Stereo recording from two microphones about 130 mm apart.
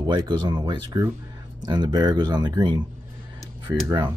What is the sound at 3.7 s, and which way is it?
Speech, 20° right (ahead or behind).